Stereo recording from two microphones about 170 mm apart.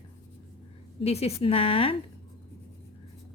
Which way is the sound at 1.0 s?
35° left (ahead or behind).